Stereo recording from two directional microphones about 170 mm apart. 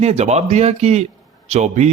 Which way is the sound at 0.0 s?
40° right (ahead or behind).